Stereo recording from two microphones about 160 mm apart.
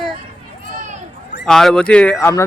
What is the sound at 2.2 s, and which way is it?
Speech, 15° left (ahead or behind).